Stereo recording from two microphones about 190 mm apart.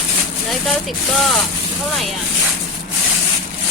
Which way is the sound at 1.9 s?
Centre (ahead or behind).